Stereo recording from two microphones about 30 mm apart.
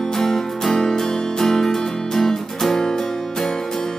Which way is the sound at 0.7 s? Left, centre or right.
Left.